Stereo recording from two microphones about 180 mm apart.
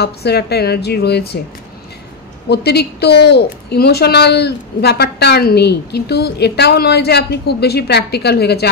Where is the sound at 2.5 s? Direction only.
65° left (ahead or behind).